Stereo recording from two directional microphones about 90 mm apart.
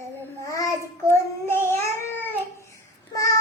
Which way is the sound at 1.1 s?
25° left (ahead or behind).